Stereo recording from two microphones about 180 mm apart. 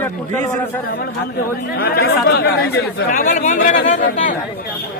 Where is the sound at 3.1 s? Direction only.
45° left (ahead or behind).